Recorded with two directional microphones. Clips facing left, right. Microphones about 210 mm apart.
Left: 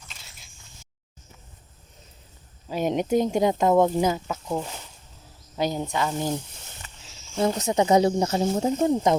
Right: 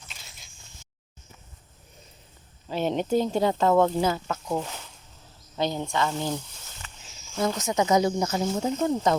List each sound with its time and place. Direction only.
0.1 s single-lens reflex camera: centre (ahead or behind)
2.6 s speech: 10° left (ahead or behind)
7.3 s speech: 30° left (ahead or behind)